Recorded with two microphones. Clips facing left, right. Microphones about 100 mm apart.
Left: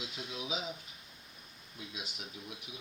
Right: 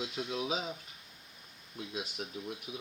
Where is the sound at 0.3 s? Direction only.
50° right (ahead or behind).